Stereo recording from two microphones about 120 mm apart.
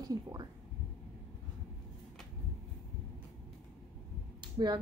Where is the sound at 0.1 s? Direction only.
30° right (ahead or behind).